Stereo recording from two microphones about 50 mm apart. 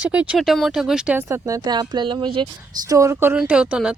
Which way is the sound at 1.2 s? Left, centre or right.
Right.